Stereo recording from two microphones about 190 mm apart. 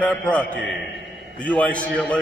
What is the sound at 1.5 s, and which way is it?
Speech, 5° left (ahead or behind).